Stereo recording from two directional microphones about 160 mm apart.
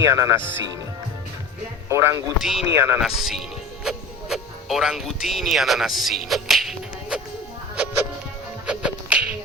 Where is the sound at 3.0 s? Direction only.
5° right (ahead or behind).